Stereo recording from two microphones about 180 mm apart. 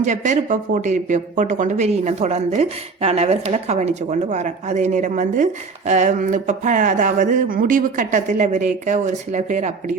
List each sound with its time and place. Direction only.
0.0 s speech: 45° right (ahead or behind)